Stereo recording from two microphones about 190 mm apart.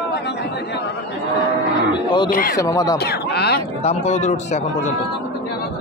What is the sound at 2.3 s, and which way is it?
Speech, 50° left (ahead or behind).